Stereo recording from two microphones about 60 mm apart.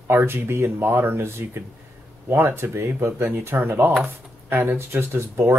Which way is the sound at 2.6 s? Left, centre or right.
Right.